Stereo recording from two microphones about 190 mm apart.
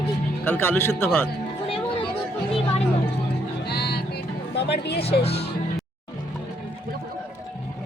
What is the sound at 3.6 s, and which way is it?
Music, 60° left (ahead or behind).